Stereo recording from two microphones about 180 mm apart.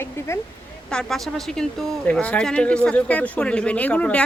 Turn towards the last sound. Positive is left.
turn(degrees=5)  # may be behind; listen again after turning